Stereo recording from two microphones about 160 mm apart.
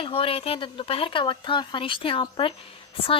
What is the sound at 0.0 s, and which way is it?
A woman's voice, 35° left (ahead or behind).